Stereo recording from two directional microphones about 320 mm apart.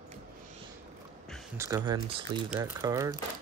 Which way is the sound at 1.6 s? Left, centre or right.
Centre.